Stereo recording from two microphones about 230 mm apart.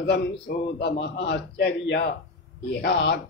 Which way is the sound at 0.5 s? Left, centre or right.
Left.